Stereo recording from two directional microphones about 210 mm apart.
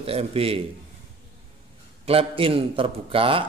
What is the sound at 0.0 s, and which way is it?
Speech, 30° right (ahead or behind).